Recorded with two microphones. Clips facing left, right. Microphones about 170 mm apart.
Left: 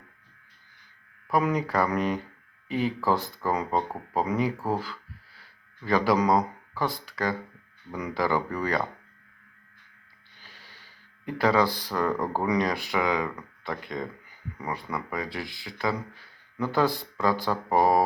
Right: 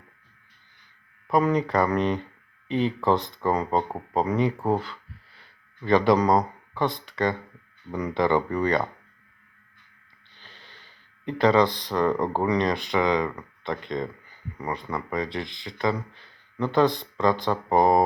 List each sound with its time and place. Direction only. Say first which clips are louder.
1.3 s speech: right 3 dB; 5° left (ahead or behind)
10.4 s a sound: right 2 dB; 10° left (ahead or behind)
11.3 s speech: right 3 dB; 5° left (ahead or behind)
11.7 s speech: right 2 dB; 20° right (ahead or behind)
11.9 s speech: right 4 dB; 5° left (ahead or behind)